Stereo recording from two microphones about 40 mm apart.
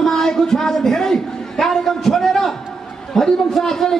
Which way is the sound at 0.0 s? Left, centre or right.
Centre.